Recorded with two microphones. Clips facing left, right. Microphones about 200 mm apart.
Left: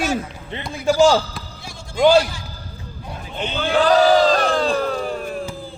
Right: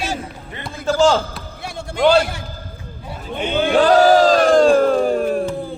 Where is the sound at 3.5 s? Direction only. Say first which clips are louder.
Right 3 dB; 50° right (ahead or behind).